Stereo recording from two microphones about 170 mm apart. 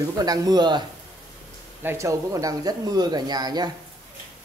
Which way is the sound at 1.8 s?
15° right (ahead or behind).